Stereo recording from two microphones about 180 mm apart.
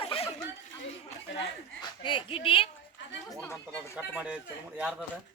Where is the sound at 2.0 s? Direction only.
25° left (ahead or behind).